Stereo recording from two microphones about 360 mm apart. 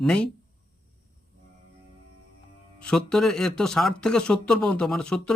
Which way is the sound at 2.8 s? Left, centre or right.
Centre.